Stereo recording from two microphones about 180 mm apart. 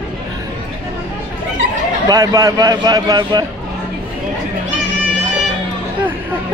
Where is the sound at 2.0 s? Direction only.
20° right (ahead or behind).